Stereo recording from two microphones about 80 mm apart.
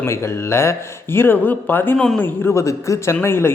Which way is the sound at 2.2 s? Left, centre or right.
Left.